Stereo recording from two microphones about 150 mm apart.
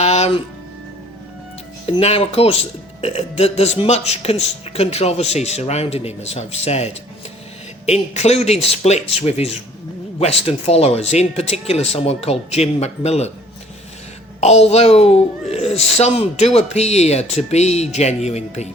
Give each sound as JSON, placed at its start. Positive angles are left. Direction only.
{"t": 0.0, "sound": "music", "side_deg": 45}
{"t": 1.9, "sound": "speech", "side_deg": 45}
{"t": 14.4, "sound": "speech", "side_deg": 45}